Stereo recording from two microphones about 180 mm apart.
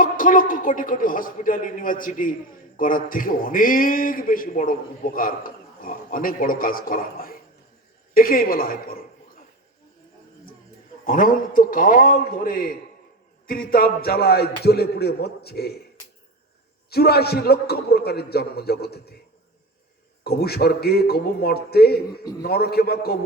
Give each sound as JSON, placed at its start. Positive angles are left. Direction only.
{"t": 0.0, "sound": "a man's voice", "side_deg": 50}
{"t": 11.0, "sound": "a man's voice", "side_deg": 50}
{"t": 16.9, "sound": "speech", "side_deg": 60}
{"t": 20.2, "sound": "speech", "side_deg": 60}